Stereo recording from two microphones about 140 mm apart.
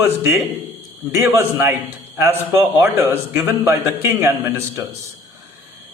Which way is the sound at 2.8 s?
15° right (ahead or behind).